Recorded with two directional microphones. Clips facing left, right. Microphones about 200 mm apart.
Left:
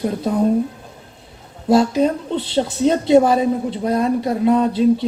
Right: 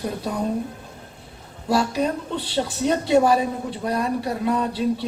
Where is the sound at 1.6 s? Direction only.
20° left (ahead or behind).